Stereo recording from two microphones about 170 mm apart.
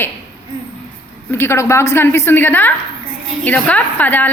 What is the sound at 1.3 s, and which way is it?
A woman's voice, 15° left (ahead or behind).